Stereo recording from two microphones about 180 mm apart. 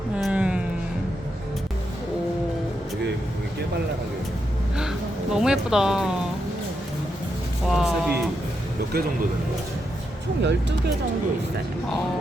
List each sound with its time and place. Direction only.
0.2 s music: 5° right (ahead or behind)
4.8 s speech: 5° right (ahead or behind)
7.7 s music: 5° right (ahead or behind)
10.4 s speech: 80° right